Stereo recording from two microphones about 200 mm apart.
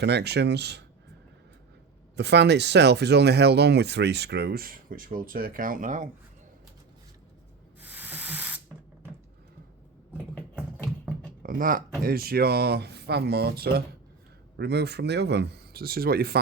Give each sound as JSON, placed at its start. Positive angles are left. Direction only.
{"t": 0.0, "sound": "speech", "side_deg": -55}
{"t": 2.1, "sound": "speech", "side_deg": -60}
{"t": 7.8, "sound": "rub", "side_deg": -10}
{"t": 11.4, "sound": "speech", "side_deg": -45}